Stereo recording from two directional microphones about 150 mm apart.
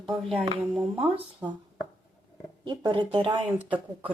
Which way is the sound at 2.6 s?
30° right (ahead or behind).